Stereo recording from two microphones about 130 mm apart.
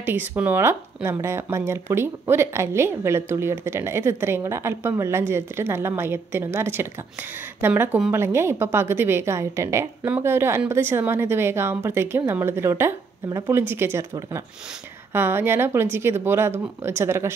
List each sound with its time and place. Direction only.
0.0 s a woman's voice: 15° right (ahead or behind)
15.1 s a woman's voice: 20° right (ahead or behind)